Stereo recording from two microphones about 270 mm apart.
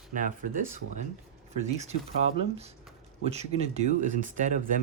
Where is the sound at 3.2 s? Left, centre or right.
Right.